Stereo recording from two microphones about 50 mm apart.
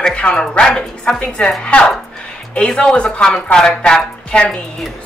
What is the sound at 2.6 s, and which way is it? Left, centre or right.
Speech, centre.